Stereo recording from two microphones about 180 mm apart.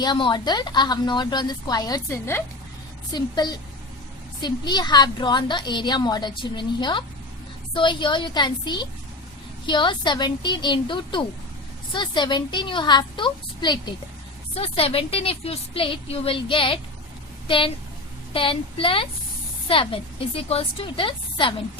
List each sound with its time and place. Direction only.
0.0 s a woman's voice: 25° left (ahead or behind)